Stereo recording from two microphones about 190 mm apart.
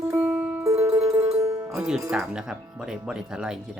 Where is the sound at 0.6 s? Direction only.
15° right (ahead or behind).